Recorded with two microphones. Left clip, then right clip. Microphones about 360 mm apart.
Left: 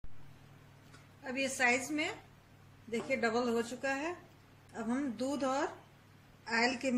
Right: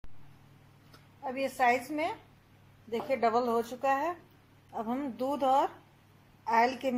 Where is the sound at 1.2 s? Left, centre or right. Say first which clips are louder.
Right 4 dB; centre.